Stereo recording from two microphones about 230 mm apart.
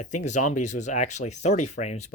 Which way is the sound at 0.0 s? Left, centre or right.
Left.